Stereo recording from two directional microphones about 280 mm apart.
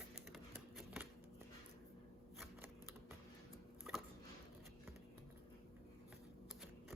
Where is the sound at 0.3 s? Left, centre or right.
Centre.